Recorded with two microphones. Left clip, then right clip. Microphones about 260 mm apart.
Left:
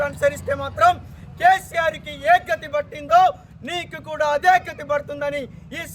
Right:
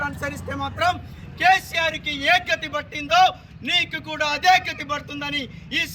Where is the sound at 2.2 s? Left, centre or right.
Centre.